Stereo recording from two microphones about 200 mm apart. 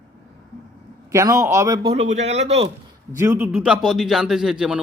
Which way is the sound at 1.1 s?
15° right (ahead or behind).